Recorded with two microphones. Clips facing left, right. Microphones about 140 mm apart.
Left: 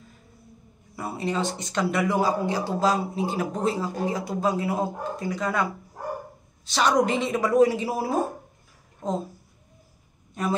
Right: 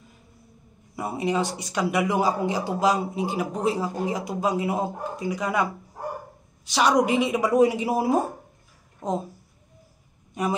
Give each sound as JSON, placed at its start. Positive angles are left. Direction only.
{"t": 0.9, "sound": "speech", "side_deg": -15}